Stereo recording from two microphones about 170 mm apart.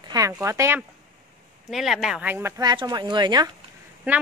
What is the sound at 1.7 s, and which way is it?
Speech, centre (ahead or behind).